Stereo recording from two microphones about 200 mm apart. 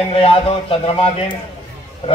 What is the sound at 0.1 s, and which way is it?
Speech, 30° left (ahead or behind).